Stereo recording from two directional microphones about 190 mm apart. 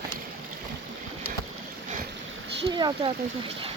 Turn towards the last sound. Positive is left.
turn(degrees=-25)  # may be behind; listen again after turning